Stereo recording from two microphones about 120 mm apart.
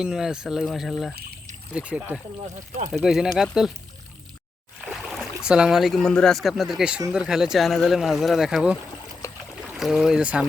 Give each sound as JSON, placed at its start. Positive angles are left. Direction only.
{"t": 0.0, "sound": "speech", "side_deg": -5}
{"t": 5.0, "sound": "speech", "side_deg": 0}
{"t": 9.2, "sound": "a sound", "side_deg": 25}
{"t": 9.6, "sound": "speech", "side_deg": -5}